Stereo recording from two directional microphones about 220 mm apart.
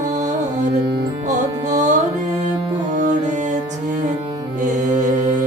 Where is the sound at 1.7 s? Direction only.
35° right (ahead or behind).